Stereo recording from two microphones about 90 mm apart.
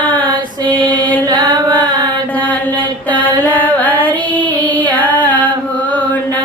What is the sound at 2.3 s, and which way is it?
Mantra, 20° left (ahead or behind).